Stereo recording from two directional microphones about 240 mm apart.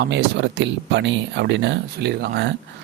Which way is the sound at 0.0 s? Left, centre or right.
Right.